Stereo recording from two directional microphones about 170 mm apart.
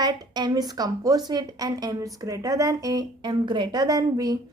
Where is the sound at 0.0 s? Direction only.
25° right (ahead or behind).